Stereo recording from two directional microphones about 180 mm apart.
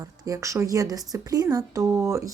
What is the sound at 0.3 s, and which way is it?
Speech, 15° right (ahead or behind).